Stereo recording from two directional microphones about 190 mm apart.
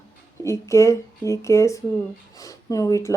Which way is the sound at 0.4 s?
15° left (ahead or behind).